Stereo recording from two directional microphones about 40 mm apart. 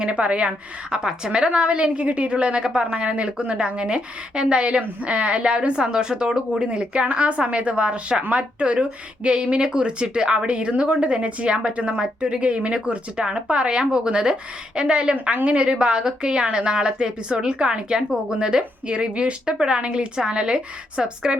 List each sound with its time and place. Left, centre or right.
0.0 s a woman's voice: right
0.9 s a woman's voice: centre
1.5 s a woman's voice: right
6.5 s a woman's voice: right
15.1 s a woman's voice: right